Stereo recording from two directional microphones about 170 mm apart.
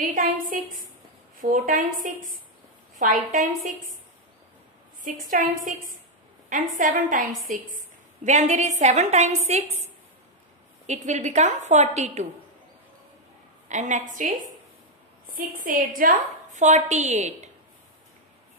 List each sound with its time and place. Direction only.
0.1 s a woman's voice: 55° right (ahead or behind)
5.0 s a woman's voice: 55° right (ahead or behind)
10.9 s a woman's voice: 45° right (ahead or behind)
13.7 s a woman's voice: 45° right (ahead or behind)